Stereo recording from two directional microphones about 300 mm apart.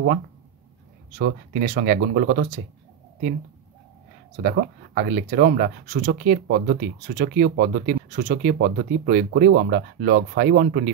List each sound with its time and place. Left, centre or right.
1.1 s speech: right
4.4 s speech: right